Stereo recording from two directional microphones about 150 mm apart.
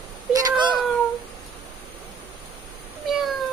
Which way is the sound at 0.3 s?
25° right (ahead or behind).